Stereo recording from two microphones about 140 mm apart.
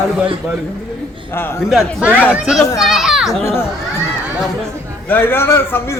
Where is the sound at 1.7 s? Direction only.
Centre (ahead or behind).